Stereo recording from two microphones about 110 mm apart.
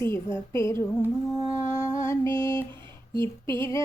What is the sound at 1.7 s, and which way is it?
Music, 25° left (ahead or behind).